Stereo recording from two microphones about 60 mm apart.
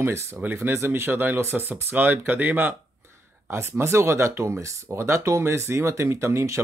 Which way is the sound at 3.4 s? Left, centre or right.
Right.